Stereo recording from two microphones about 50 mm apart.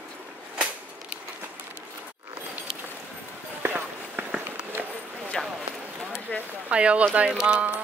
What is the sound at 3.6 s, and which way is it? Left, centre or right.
Run, right.